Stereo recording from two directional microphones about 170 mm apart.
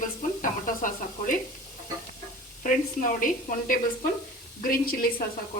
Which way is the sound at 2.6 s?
50° left (ahead or behind).